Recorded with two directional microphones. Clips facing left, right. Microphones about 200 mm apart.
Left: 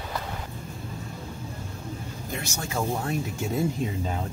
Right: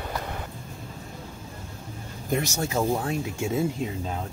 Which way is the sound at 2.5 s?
25° right (ahead or behind).